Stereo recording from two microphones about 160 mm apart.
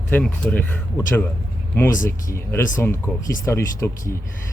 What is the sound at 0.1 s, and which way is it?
Speech, 10° left (ahead or behind).